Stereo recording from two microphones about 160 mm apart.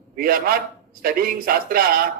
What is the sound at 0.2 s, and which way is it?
A man's voice, 65° right (ahead or behind).